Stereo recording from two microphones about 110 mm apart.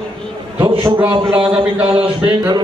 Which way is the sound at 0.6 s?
50° right (ahead or behind).